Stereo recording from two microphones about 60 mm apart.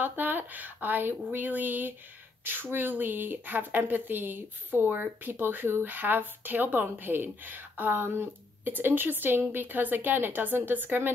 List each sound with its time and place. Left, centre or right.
0.0 s speech: right